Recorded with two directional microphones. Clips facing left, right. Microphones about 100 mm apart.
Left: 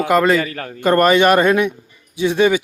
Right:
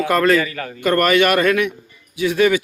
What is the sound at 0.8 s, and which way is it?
Speech, 25° left (ahead or behind).